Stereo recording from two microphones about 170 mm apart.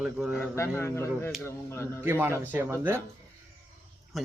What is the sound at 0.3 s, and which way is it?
A man's voice, 15° left (ahead or behind).